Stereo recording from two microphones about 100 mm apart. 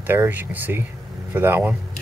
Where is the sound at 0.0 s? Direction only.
20° right (ahead or behind).